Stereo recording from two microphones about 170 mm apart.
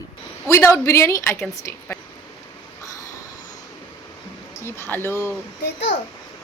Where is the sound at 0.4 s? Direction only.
15° left (ahead or behind).